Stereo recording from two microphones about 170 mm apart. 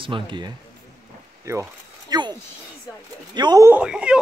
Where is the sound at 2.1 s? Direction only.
25° right (ahead or behind).